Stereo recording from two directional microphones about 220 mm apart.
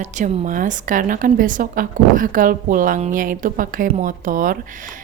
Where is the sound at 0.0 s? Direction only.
35° right (ahead or behind).